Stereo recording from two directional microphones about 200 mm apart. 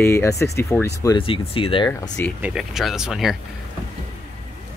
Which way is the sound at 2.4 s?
Centre (ahead or behind).